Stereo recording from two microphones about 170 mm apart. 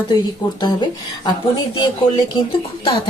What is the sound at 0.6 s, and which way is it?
Speech, 25° left (ahead or behind).